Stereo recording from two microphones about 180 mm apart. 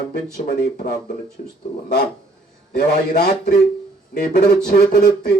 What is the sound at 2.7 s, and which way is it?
Speech, 60° left (ahead or behind).